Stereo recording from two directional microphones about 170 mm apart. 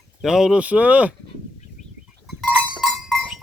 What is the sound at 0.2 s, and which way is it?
Speech, 5° right (ahead or behind).